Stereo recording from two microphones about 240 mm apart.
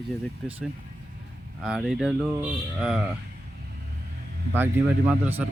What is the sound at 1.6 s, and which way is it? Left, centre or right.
Speech, centre.